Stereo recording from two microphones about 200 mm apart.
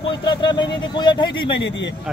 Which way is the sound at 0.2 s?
20° left (ahead or behind).